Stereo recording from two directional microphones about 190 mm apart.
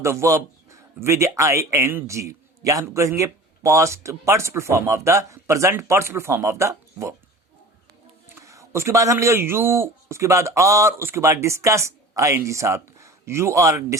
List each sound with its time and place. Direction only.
0.0 s a man's voice: 15° right (ahead or behind)
8.4 s a man's voice: 15° right (ahead or behind)